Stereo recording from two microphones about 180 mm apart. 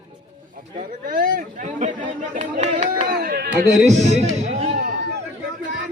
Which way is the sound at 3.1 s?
55° right (ahead or behind).